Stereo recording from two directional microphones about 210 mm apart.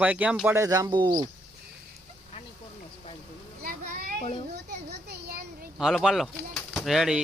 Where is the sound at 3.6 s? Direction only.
45° right (ahead or behind).